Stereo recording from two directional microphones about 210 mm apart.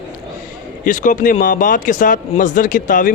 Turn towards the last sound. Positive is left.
turn(degrees=40)  # may be behind; listen again after turning